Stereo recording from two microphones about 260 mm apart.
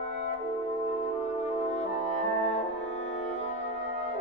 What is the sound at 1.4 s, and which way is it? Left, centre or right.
Music, left.